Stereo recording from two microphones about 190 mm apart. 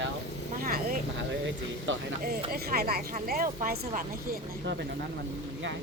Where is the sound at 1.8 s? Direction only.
80° right.